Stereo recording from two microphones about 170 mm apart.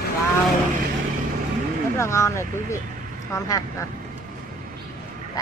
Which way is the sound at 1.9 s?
15° left (ahead or behind).